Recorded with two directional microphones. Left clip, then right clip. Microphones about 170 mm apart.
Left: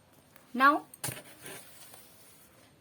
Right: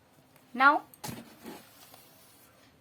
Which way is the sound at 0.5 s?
60° left (ahead or behind).